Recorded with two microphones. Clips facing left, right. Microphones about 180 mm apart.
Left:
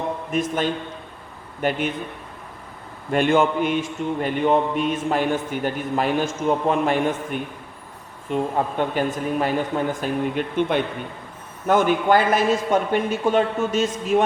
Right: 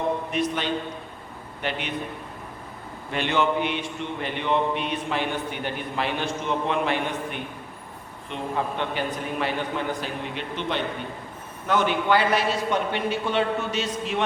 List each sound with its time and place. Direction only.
0.3 s a man's voice: 45° left (ahead or behind)
3.1 s a man's voice: 45° left (ahead or behind)